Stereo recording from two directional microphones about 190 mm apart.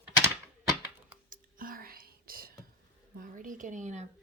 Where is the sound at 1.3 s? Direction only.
50° right (ahead or behind).